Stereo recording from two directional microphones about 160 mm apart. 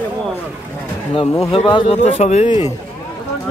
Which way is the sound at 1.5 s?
30° left (ahead or behind).